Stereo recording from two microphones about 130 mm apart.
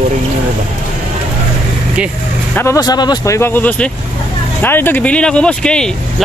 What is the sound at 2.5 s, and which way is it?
Speech, 25° left (ahead or behind).